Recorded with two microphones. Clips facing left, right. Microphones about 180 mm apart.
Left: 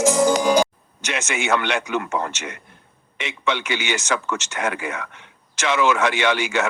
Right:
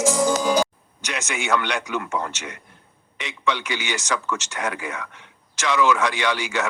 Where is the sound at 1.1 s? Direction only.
20° left (ahead or behind).